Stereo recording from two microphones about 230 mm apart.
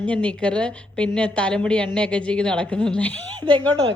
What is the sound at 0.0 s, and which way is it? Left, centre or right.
A woman's voice, centre.